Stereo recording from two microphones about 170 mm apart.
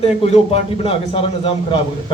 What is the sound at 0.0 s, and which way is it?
A man's voice, 35° left (ahead or behind).